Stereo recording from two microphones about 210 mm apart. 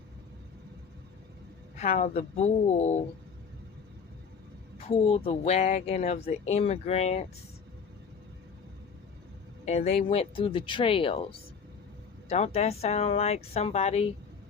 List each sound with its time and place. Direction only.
1.8 s speech: 30° left (ahead or behind)
4.8 s a woman's voice: 30° left (ahead or behind)
9.6 s a woman's voice: 30° left (ahead or behind)